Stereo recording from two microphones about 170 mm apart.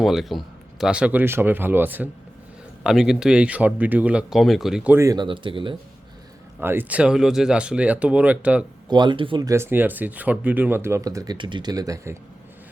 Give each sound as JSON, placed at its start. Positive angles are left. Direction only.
{"t": 0.0, "sound": "speech", "side_deg": 0}
{"t": 6.6, "sound": "speech", "side_deg": -10}
{"t": 8.9, "sound": "speech", "side_deg": -25}
{"t": 9.5, "sound": "speech", "side_deg": -15}